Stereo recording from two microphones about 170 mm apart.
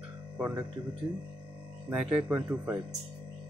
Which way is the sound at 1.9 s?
10° right (ahead or behind).